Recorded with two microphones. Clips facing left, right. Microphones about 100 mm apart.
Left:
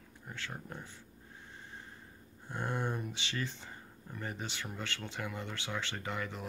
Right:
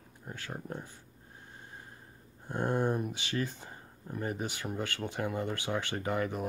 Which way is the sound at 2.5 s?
45° right (ahead or behind).